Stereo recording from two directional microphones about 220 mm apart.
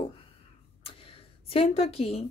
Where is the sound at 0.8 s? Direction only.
25° left (ahead or behind).